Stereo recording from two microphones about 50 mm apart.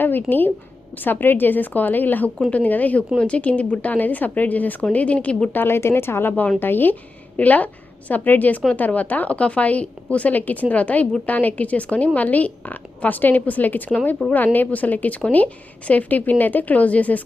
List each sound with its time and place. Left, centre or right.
0.0 s a woman's voice: left
5.5 s speech: left
6.6 s speech: left
7.3 s a woman's voice: left